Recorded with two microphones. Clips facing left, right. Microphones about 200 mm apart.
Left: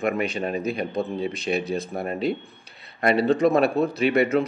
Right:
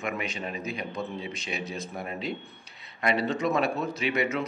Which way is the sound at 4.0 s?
60° left (ahead or behind).